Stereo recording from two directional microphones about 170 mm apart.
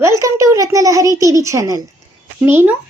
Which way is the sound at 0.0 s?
15° right (ahead or behind).